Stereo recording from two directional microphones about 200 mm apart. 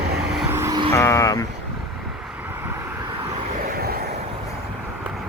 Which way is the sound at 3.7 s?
50° right (ahead or behind).